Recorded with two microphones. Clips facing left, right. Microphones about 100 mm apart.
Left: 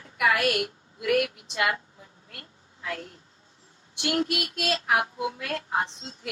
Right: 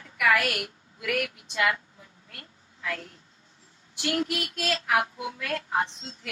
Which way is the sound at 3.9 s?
30° left (ahead or behind).